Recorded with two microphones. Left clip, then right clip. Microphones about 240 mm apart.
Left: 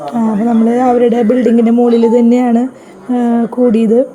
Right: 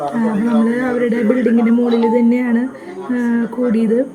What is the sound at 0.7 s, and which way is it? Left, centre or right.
Speech, centre.